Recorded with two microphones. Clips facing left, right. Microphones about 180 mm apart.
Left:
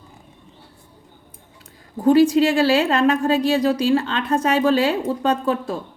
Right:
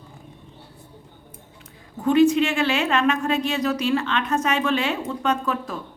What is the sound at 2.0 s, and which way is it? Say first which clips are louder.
A woman's voice: left 3 dB; 35° left (ahead or behind).